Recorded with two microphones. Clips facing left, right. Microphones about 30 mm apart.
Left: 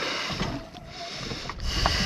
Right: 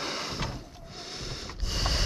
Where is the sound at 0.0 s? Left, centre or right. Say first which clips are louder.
Left 4 dB; centre.